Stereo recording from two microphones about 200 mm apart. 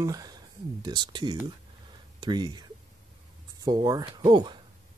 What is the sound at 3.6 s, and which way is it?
Speech, 20° right (ahead or behind).